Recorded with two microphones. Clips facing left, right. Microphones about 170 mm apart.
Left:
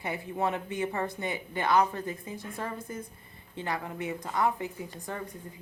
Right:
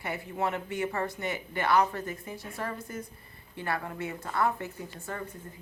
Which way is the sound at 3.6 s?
15° left (ahead or behind).